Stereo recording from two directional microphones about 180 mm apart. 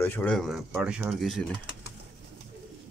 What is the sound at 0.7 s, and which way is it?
Speech, 10° right (ahead or behind).